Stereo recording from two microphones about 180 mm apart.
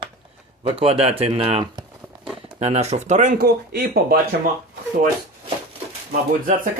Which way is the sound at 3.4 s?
60° right (ahead or behind).